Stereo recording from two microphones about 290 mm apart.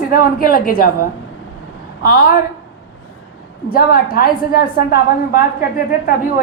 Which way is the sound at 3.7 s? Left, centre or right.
Left.